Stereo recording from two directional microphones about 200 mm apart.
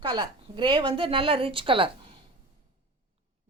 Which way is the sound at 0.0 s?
20° right (ahead or behind).